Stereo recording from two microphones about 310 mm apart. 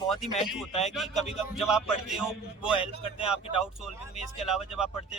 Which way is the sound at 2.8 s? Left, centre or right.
Centre.